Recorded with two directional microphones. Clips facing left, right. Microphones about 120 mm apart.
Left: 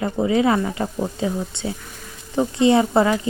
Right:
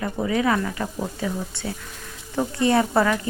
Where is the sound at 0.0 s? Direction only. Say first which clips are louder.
Left 4 dB; 25° left (ahead or behind).